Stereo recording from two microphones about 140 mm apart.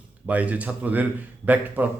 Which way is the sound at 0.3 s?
10° right (ahead or behind).